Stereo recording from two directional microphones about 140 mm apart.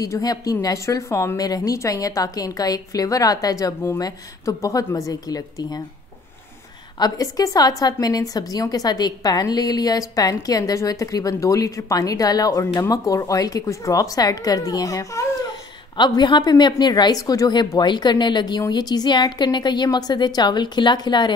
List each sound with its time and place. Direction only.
0.0 s a woman's voice: 25° left (ahead or behind)
7.0 s a woman's voice: 25° left (ahead or behind)